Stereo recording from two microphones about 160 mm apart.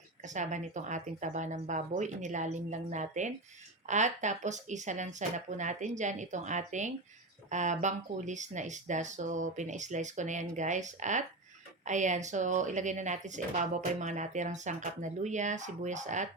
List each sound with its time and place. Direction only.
0.2 s speech: 50° right (ahead or behind)